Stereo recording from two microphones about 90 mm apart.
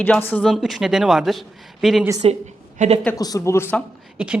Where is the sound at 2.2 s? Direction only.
90° right.